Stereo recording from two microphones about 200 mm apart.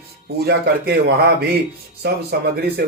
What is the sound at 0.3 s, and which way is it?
Speech, 55° right (ahead or behind).